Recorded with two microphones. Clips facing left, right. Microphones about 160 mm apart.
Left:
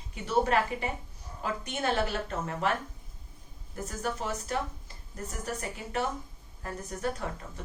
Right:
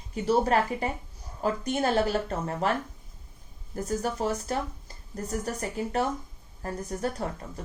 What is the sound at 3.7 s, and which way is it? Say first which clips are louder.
Speech: right 5 dB; 40° right (ahead or behind).